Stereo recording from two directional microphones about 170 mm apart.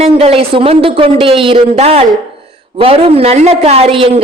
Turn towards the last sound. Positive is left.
turn(degrees=-35)  # may be behind; listen again after turning